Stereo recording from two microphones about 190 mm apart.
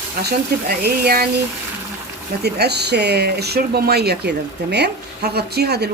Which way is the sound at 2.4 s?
60° right (ahead or behind).